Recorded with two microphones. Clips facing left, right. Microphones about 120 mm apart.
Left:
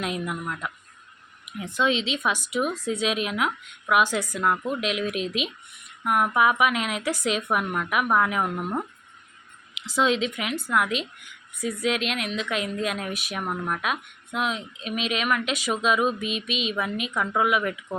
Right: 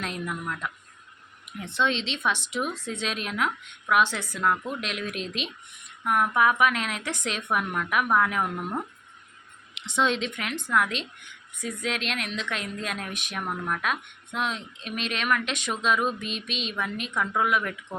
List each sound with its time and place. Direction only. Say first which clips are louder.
0.0 s a woman's voice: left 3 dB; 10° left (ahead or behind)